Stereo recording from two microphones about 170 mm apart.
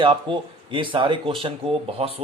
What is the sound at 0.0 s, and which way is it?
Speech, 30° right (ahead or behind).